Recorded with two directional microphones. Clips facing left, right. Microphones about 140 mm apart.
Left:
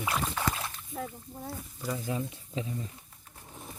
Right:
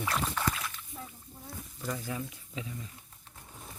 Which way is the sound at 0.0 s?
10° left (ahead or behind).